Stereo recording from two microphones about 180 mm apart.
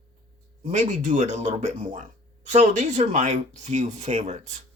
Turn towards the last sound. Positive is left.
turn(degrees=-40)  # may be behind; listen again after turning